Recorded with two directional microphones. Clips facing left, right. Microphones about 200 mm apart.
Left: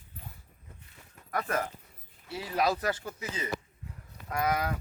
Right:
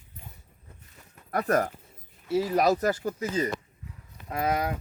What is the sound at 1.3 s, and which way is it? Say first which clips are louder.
Speech: right 7 dB; 40° right (ahead or behind).